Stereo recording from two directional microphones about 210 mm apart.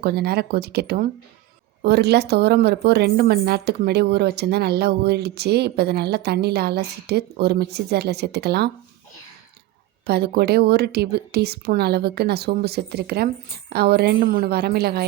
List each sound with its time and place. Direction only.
0.0 s a woman's voice: 50° right (ahead or behind)
10.1 s a woman's voice: 50° right (ahead or behind)